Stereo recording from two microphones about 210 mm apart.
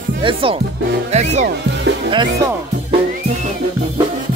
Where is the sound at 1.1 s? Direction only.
35° right (ahead or behind).